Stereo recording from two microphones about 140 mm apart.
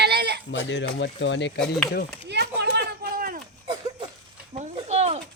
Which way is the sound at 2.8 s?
90° right.